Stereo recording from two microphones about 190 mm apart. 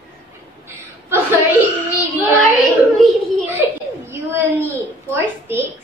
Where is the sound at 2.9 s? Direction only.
10° right (ahead or behind).